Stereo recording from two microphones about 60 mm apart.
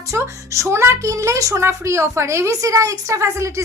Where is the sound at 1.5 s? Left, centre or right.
Right.